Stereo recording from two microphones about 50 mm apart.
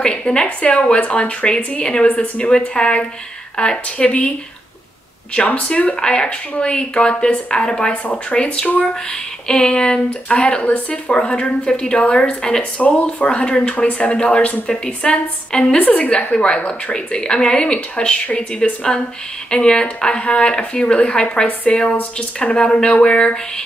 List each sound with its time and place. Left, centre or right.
0.0 s speech: centre
5.3 s speech: left